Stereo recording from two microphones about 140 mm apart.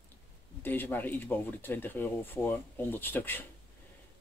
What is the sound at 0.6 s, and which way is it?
Speech, 15° left (ahead or behind).